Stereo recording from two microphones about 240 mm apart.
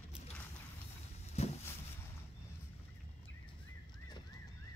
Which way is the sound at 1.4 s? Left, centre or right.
Left.